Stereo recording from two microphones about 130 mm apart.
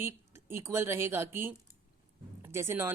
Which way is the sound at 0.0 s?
20° right (ahead or behind).